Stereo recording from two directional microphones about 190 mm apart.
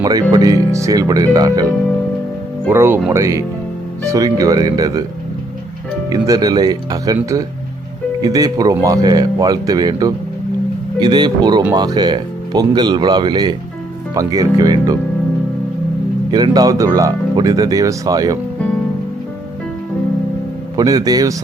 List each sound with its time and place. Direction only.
0.0 s speech: 20° right (ahead or behind)
2.6 s speech: 10° right (ahead or behind)
6.1 s speech: 20° right (ahead or behind)
16.3 s speech: 20° right (ahead or behind)
20.7 s speech: 20° right (ahead or behind)